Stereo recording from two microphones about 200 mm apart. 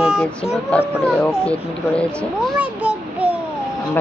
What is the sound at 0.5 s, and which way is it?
Speech, 5° left (ahead or behind).